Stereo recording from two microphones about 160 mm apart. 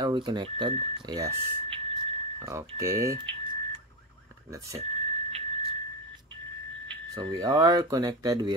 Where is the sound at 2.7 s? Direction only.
20° right (ahead or behind).